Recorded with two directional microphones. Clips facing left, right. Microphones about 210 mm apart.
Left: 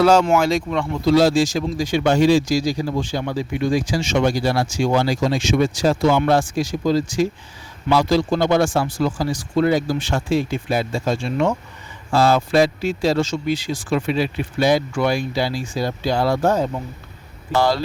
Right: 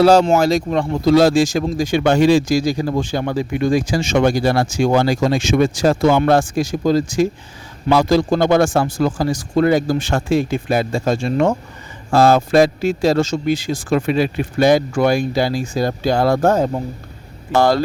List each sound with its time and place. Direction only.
0.0 s speech: 35° right (ahead or behind)